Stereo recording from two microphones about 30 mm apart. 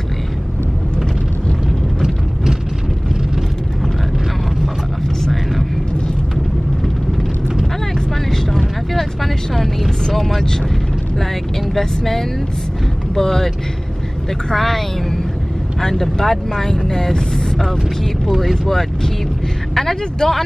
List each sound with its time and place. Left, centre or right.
2.0 s a sound: centre
5.3 s vehicle: centre
8.3 s vehicle: centre
11.7 s vehicle: centre
13.1 s speech: centre
14.5 s speech: centre